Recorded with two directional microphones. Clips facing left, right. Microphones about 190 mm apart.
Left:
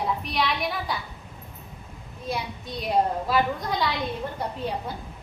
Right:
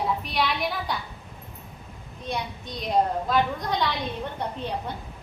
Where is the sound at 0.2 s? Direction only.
Centre (ahead or behind).